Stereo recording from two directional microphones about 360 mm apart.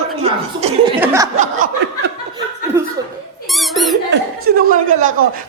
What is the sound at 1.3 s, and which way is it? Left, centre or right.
Snicker, right.